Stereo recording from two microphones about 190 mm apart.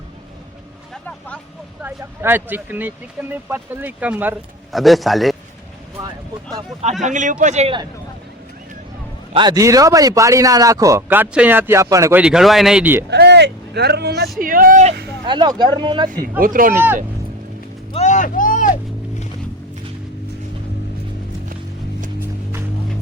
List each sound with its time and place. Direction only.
1.8 s speech: 10° right (ahead or behind)
7.0 s a man's voice: 40° right (ahead or behind)
9.3 s speech: 25° right (ahead or behind)
12.2 s speech: centre (ahead or behind)
13.1 s speech: 60° right (ahead or behind)
14.3 s speech: 45° right (ahead or behind)
15.3 s speech: 25° right (ahead or behind)
16.0 s speech: 45° right (ahead or behind)
16.7 s speech: 10° right (ahead or behind)
17.9 s vehicle: 40° left (ahead or behind)